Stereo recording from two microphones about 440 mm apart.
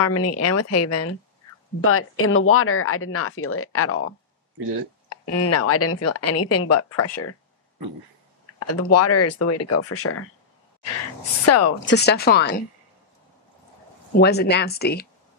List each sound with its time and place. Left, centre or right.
0.0 s speech: left
5.1 s speech: left
8.5 s speech: left
11.4 s speech: left
11.9 s speech: left
14.2 s speech: left